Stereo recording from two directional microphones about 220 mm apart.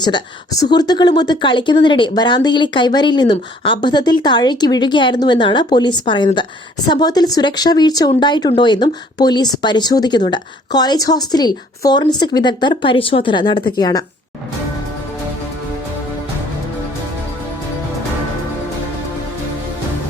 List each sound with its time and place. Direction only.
0.0 s speech: 15° left (ahead or behind)